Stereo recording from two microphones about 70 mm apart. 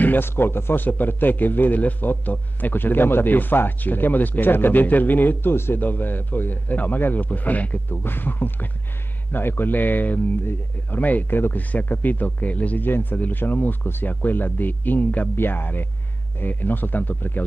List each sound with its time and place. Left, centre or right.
0.0 s a man's voice: left